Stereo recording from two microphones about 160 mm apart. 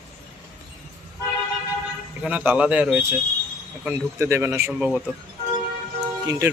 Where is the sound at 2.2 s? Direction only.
10° right (ahead or behind).